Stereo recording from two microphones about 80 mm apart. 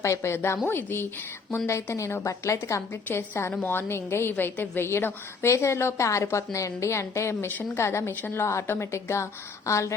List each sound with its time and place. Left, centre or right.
0.0 s a woman's voice: left
2.9 s a woman's voice: left